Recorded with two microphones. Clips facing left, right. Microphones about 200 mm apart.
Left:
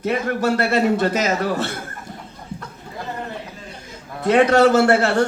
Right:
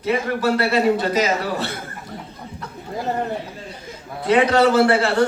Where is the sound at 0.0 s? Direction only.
50° left (ahead or behind).